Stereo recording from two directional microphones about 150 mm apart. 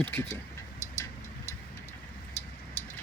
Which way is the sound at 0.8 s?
15° left (ahead or behind).